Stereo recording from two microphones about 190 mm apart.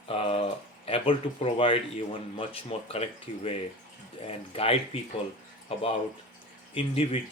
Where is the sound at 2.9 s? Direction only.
30° left (ahead or behind).